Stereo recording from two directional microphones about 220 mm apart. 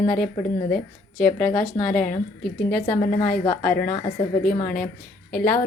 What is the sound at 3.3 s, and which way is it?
A woman's voice, 5° left (ahead or behind).